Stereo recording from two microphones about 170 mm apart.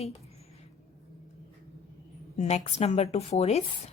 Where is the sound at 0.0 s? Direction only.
35° left (ahead or behind).